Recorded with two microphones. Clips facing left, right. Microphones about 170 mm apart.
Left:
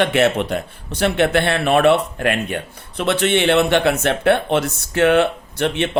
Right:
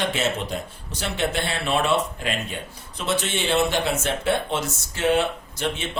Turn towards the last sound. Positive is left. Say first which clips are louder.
# left 8 dB
turn(degrees=65)  # may be behind; listen again after turning